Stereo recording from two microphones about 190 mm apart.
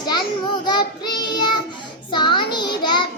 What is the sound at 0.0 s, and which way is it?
Child singing, 25° left (ahead or behind).